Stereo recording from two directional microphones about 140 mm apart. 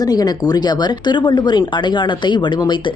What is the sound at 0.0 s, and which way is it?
Speech, 25° left (ahead or behind).